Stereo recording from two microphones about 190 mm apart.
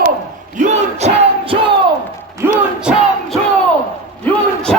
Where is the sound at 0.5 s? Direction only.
35° right (ahead or behind).